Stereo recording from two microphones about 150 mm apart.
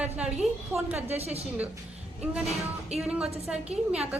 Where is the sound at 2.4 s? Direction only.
Centre (ahead or behind).